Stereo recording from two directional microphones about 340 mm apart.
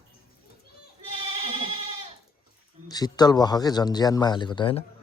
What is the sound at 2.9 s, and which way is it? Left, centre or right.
Speech, centre.